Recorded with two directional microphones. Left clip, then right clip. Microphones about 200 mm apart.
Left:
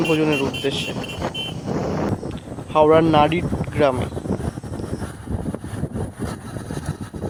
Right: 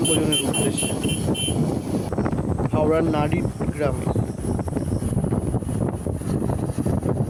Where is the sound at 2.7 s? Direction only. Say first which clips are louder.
Left 7 dB; 35° left (ahead or behind).